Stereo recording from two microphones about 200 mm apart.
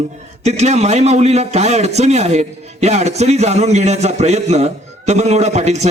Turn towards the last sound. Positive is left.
turn(degrees=-35)  # may be behind; listen again after turning